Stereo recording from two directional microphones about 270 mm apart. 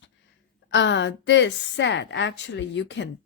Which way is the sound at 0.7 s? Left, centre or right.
Left.